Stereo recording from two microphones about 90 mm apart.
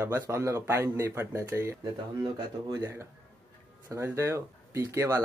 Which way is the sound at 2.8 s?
30° right (ahead or behind).